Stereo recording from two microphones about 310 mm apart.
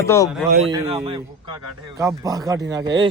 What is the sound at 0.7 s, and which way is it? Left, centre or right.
Speech, centre.